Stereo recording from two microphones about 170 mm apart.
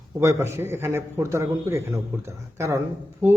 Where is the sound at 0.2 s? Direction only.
15° right (ahead or behind).